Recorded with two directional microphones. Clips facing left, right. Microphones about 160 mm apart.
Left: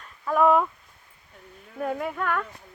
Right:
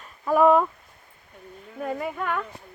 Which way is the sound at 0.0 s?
5° right (ahead or behind).